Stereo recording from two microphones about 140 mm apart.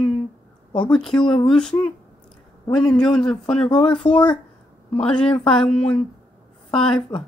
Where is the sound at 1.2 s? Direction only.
35° left (ahead or behind).